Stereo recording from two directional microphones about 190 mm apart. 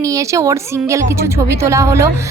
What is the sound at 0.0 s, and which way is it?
A woman's voice, 15° right (ahead or behind).